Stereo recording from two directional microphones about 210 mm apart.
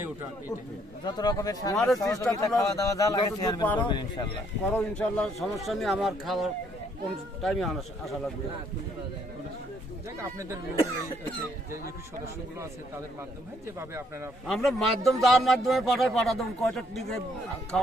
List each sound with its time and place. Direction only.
1.0 s speech: 20° left (ahead or behind)
1.7 s a man's voice: centre (ahead or behind)
2.0 s a man's voice: 15° left (ahead or behind)
4.7 s a man's voice: 5° left (ahead or behind)
13.7 s speech: 10° right (ahead or behind)
14.4 s a man's voice: centre (ahead or behind)